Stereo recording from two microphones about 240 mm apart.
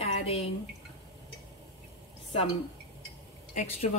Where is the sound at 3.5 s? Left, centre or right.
Left.